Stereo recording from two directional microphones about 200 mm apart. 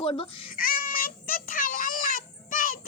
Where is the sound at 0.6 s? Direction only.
45° left (ahead or behind).